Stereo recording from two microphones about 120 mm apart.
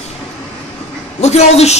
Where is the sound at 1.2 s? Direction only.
65° left (ahead or behind).